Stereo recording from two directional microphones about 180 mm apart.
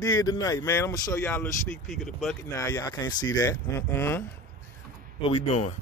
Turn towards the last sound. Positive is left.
turn(degrees=35)  # may be behind; listen again after turning